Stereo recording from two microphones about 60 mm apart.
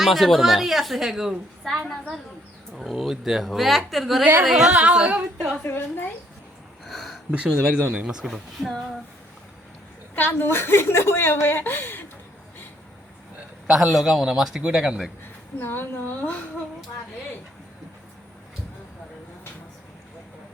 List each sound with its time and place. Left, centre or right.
0.0 s speech: centre
2.7 s a man's voice: centre
5.6 s a woman's voice: left
6.8 s a sound: centre
7.3 s speech: centre
10.2 s a woman's voice: left
13.7 s a man's voice: centre
15.5 s a woman's voice: left